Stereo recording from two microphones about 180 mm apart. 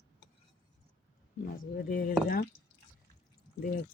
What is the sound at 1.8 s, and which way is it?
Speech, 50° left (ahead or behind).